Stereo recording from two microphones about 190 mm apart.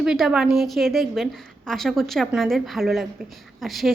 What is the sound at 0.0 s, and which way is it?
A woman's voice, 5° right (ahead or behind).